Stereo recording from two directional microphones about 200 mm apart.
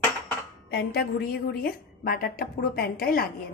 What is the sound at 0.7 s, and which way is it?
A woman's voice, 50° left (ahead or behind).